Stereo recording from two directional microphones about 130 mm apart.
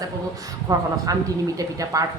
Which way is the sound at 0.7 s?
25° right (ahead or behind).